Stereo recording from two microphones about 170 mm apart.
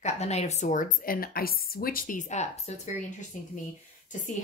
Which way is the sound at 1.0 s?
60° left (ahead or behind).